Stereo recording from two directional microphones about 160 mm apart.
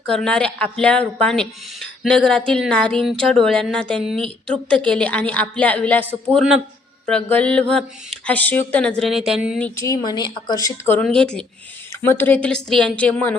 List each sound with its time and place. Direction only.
0.1 s a woman's voice: 5° left (ahead or behind)
6.3 s a woman's voice: 5° right (ahead or behind)
7.1 s a woman's voice: 10° left (ahead or behind)
9.6 s speech: 15° left (ahead or behind)
10.9 s a woman's voice: 5° left (ahead or behind)